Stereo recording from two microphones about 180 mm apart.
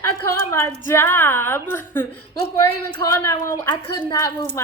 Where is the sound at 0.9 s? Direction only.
15° left (ahead or behind).